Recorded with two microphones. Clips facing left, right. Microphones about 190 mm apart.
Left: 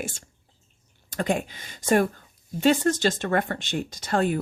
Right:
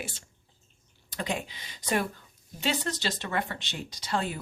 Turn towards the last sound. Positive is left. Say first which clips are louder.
# left 7 dB
turn(degrees=50)  # may be behind; listen again after turning